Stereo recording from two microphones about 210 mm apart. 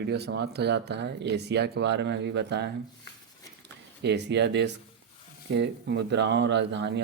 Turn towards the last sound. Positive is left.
turn(degrees=-55)  # may be behind; listen again after turning